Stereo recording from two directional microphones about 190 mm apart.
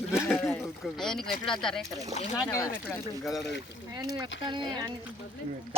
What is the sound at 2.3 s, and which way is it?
Speech, 15° left (ahead or behind).